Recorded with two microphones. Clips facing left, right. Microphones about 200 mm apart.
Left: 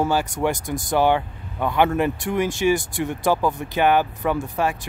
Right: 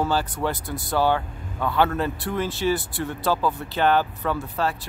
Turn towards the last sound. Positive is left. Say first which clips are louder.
# left 3 dB
turn(degrees=15)  # may be behind; listen again after turning